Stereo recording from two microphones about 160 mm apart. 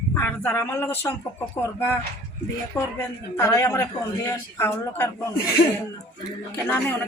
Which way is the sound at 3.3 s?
15° left (ahead or behind).